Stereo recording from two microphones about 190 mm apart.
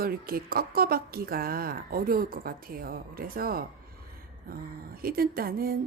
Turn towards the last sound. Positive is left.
turn(degrees=-50)  # may be behind; listen again after turning